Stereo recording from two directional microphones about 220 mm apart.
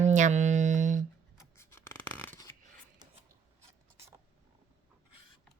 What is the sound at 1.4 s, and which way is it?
Scissors, 10° left (ahead or behind).